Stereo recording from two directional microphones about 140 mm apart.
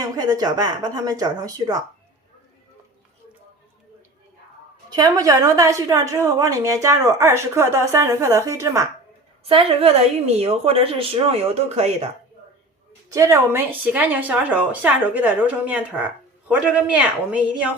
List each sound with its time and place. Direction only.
0.0 s a woman's voice: 25° right (ahead or behind)
4.9 s a woman's voice: 30° right (ahead or behind)
9.4 s a woman's voice: 45° right (ahead or behind)
13.1 s a woman's voice: 20° right (ahead or behind)